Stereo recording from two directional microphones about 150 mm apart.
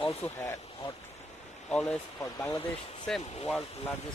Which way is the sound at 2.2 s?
15° left (ahead or behind).